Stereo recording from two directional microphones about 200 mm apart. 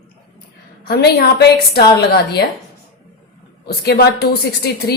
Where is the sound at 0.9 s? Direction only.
55° left (ahead or behind).